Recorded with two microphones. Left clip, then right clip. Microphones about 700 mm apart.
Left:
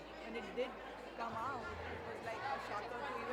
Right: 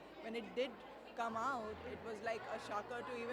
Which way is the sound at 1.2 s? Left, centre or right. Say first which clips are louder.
Right 3 dB; right.